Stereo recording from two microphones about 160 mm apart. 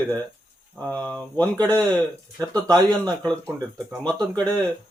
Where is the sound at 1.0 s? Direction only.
10° left (ahead or behind).